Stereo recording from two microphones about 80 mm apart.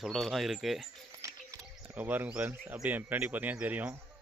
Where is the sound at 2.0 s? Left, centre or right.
Right.